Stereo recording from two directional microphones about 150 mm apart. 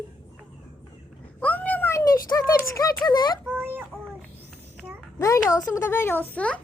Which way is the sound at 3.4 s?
10° right (ahead or behind).